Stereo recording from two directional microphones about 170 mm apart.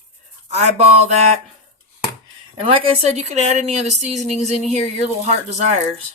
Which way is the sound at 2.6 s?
35° right (ahead or behind).